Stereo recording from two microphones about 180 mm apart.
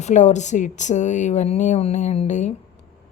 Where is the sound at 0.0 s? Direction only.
40° left (ahead or behind).